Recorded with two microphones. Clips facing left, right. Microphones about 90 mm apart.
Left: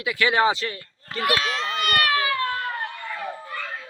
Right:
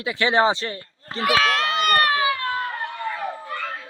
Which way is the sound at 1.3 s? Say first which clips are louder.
Right 6 dB; 80° right.